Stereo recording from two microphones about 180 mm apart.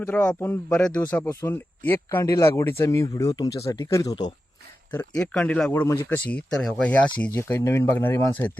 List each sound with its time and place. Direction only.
0.0 s a man's voice: 5° left (ahead or behind)
4.9 s a man's voice: 5° left (ahead or behind)